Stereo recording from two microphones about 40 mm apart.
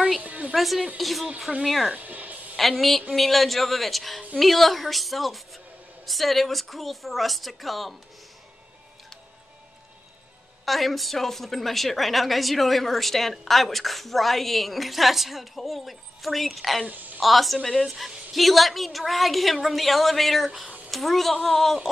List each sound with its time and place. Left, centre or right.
0.2 s a sound: right
0.9 s a woman's voice: centre
2.0 s music: right
2.5 s a woman's voice: centre
10.6 s a woman's voice: centre
16.8 s a woman's voice: right
17.2 s a woman's voice: centre